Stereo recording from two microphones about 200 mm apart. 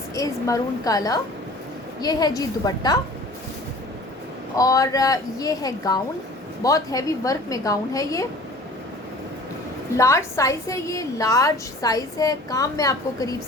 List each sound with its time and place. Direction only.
0.1 s a woman's voice: 15° left (ahead or behind)
4.5 s a woman's voice: 15° left (ahead or behind)
10.0 s a woman's voice: 15° left (ahead or behind)